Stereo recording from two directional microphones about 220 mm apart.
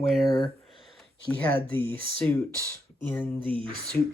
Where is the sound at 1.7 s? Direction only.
10° left (ahead or behind).